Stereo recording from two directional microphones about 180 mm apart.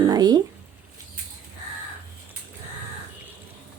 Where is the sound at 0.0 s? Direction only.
20° right (ahead or behind).